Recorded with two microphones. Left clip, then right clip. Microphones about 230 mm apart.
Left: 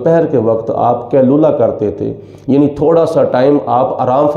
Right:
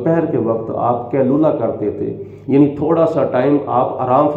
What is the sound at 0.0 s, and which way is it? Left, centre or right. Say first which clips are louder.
Speech: left 6 dB; left.